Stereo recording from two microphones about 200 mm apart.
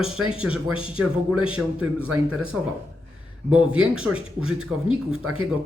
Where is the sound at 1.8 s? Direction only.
90° right.